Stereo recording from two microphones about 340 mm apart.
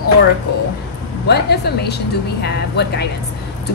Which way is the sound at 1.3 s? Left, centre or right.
Left.